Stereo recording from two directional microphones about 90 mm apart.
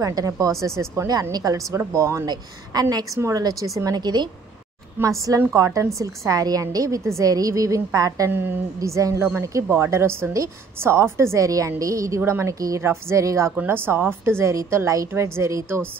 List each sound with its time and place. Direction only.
0.0 s a woman's voice: 40° right (ahead or behind)
2.2 s a woman's voice: 45° right (ahead or behind)
5.0 s a woman's voice: 25° right (ahead or behind); by 8.3 s 40° right (ahead or behind)
8.3 s a woman's voice: 25° right (ahead or behind)
8.7 s a woman's voice: 35° right (ahead or behind)